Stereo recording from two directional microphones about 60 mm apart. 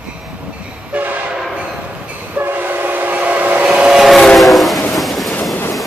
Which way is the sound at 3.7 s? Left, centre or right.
Centre.